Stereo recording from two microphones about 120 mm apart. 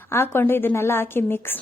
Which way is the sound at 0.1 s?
20° left (ahead or behind).